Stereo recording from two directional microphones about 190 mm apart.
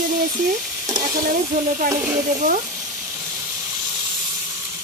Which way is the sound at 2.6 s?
5° right (ahead or behind).